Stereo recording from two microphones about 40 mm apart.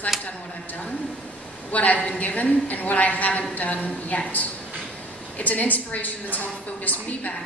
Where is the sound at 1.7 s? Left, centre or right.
Left.